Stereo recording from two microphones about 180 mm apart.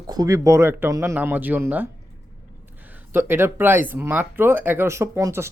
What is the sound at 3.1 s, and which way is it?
Speech, 15° right (ahead or behind).